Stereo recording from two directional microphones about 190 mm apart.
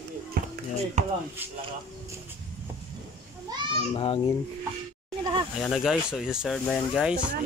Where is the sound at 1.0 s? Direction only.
35° right (ahead or behind).